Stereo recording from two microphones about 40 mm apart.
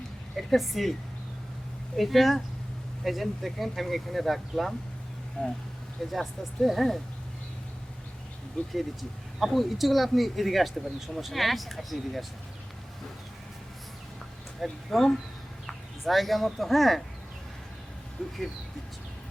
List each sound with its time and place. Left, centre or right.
0.3 s speech: centre
2.0 s speech: centre
5.4 s speech: centre
6.1 s speech: centre
8.7 s speech: centre
14.6 s speech: centre
18.2 s speech: centre